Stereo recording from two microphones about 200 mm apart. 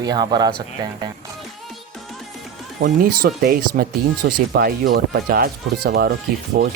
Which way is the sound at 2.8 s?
50° right (ahead or behind).